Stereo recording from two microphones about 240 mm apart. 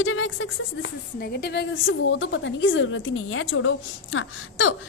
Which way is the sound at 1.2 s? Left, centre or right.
Left.